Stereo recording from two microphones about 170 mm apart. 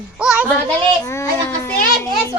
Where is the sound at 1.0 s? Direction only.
15° left (ahead or behind).